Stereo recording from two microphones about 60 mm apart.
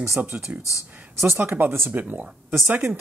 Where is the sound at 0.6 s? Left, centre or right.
Left.